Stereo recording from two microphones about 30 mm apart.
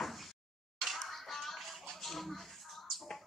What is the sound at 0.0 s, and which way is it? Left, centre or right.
Music, centre.